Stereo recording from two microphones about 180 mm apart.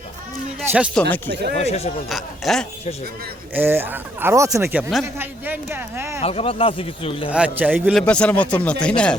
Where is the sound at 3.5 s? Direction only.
10° right (ahead or behind).